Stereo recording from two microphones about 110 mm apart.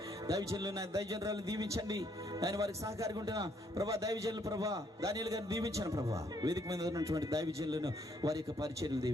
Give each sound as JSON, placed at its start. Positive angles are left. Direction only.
{"t": 0.3, "sound": "a man's voice", "side_deg": -35}